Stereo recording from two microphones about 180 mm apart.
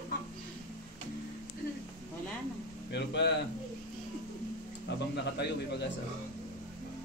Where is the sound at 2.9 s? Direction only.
70° left (ahead or behind).